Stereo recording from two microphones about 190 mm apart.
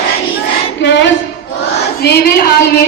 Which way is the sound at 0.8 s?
65° left (ahead or behind).